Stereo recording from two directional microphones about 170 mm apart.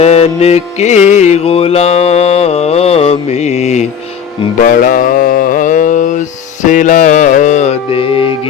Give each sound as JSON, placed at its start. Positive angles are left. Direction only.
{"t": 0.0, "sound": "music", "side_deg": 40}
{"t": 4.6, "sound": "mantra", "side_deg": 50}